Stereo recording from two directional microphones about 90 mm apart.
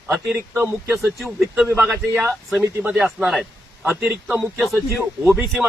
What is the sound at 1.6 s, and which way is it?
Speech, 25° right (ahead or behind).